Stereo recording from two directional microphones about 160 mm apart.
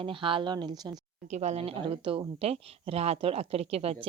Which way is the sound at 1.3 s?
45° right (ahead or behind).